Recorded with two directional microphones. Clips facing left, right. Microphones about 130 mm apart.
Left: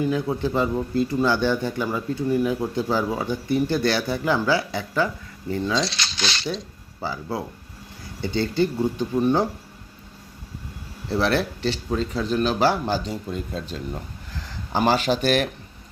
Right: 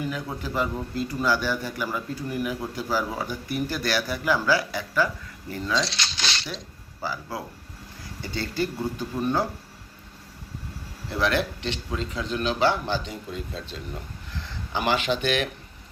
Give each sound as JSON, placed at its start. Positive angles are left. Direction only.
{"t": 0.0, "sound": "speech", "side_deg": 25}
{"t": 7.0, "sound": "speech", "side_deg": 25}
{"t": 11.1, "sound": "a man's voice", "side_deg": 35}